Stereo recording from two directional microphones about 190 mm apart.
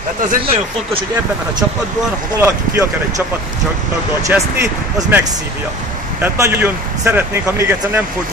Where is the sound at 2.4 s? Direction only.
15° right (ahead or behind).